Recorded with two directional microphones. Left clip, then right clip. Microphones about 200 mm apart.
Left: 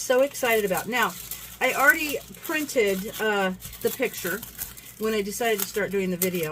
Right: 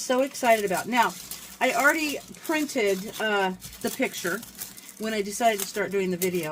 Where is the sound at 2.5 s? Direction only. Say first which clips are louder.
Left 1 dB; 20° right (ahead or behind).